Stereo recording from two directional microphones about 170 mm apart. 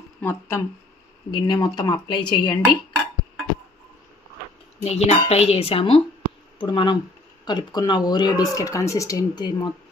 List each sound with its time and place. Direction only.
0.2 s speech: 15° left (ahead or behind)
4.8 s speech: 40° left (ahead or behind)